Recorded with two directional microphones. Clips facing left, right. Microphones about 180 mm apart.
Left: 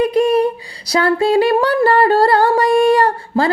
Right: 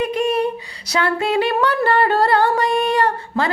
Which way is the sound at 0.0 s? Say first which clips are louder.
Left 5 dB; 35° left (ahead or behind).